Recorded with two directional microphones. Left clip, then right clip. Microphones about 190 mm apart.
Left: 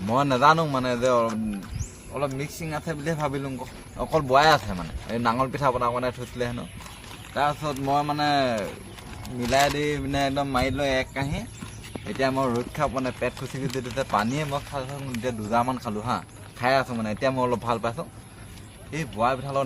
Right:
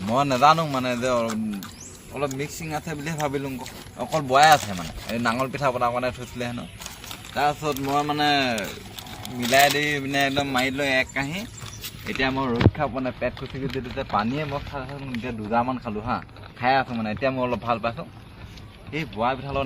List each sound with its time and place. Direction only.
0.1 s speech: 5° left (ahead or behind)
2.4 s speech: centre (ahead or behind)
18.9 s speech: 10° left (ahead or behind)